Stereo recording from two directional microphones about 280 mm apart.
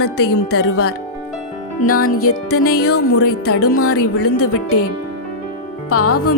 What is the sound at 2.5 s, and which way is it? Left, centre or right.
Speech, left.